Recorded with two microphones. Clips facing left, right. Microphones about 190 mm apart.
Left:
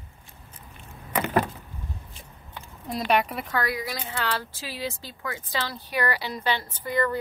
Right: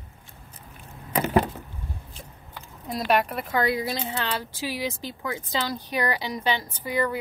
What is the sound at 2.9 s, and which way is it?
Speech, centre (ahead or behind).